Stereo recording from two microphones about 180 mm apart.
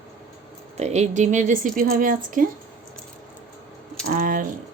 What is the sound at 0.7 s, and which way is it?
Speech, 40° right (ahead or behind).